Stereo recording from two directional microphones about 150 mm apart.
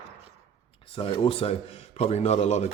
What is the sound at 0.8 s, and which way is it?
A man's voice, 35° left (ahead or behind).